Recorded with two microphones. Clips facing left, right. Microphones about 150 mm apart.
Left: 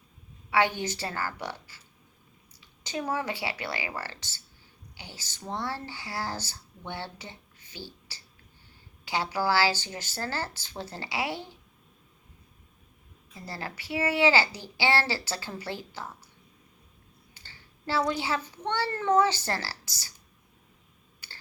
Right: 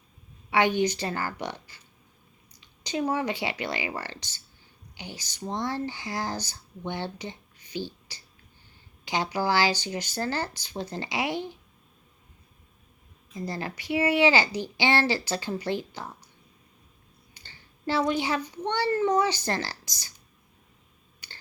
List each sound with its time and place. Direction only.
0.5 s speech: 20° right (ahead or behind)
13.4 s speech: 20° right (ahead or behind)
17.4 s a sound: 15° right (ahead or behind)
17.8 s speech: 20° right (ahead or behind)
21.2 s computer keyboard: 20° right (ahead or behind)